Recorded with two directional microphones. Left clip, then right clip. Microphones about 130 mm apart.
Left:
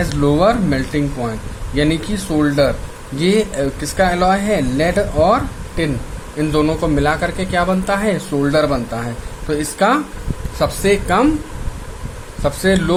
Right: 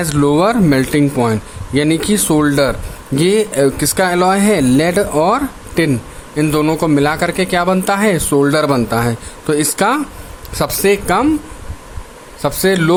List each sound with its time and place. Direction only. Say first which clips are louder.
0.0 s speech: right 1 dB; 60° right (ahead or behind)
3.2 s speech: right 4 dB; 50° right (ahead or behind)
12.4 s speech: right 2 dB; 45° right (ahead or behind)